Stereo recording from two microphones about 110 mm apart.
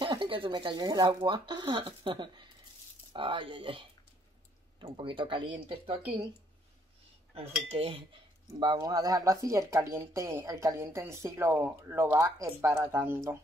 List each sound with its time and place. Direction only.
0.0 s speech: 45° right (ahead or behind)
7.6 s cutlery: 60° right (ahead or behind)
8.7 s speech: 30° right (ahead or behind)